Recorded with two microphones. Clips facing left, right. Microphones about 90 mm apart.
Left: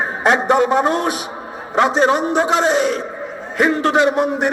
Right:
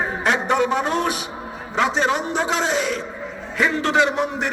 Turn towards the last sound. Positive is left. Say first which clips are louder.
# left 4 dB
turn(degrees=45)  # may be behind; listen again after turning